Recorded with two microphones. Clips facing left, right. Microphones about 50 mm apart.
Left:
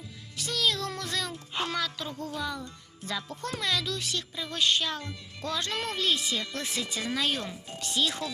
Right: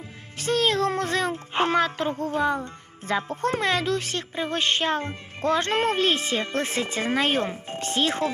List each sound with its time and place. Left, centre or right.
0.3 s music: right
3.1 s speech: right